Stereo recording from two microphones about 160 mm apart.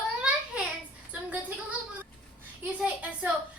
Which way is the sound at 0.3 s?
5° right (ahead or behind).